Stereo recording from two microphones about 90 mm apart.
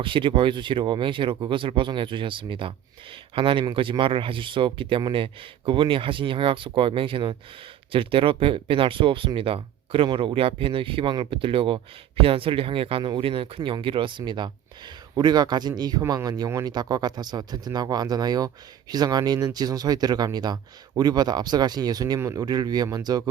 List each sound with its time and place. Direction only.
0.0 s speech: 70° right (ahead or behind)
7.9 s speech: 85° right; by 22.2 s 45° right (ahead or behind)
22.2 s speech: 35° right (ahead or behind)
22.4 s speech: 50° right (ahead or behind)